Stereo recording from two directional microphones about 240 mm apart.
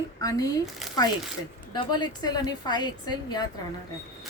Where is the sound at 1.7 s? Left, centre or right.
Centre.